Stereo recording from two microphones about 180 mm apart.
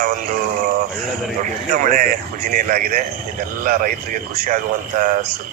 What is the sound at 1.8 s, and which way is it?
Speech, 45° right (ahead or behind).